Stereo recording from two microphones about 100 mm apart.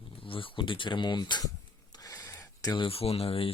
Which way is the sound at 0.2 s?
65° left (ahead or behind).